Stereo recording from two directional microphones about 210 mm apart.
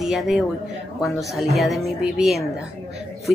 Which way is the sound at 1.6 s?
Centre (ahead or behind).